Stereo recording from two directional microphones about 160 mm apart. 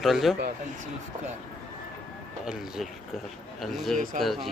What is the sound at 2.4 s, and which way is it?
Speech, 5° right (ahead or behind).